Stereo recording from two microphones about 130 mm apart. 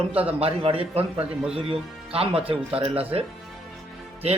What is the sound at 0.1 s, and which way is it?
Speech, 50° right (ahead or behind).